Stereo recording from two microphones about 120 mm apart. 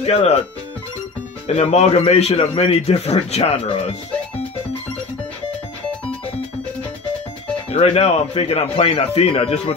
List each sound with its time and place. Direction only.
0.0 s a man's voice: 60° left (ahead or behind)
1.5 s a man's voice: 65° left (ahead or behind)
7.7 s a man's voice: 55° left (ahead or behind)